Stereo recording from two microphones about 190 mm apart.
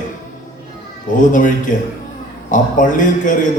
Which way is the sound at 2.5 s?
40° left (ahead or behind).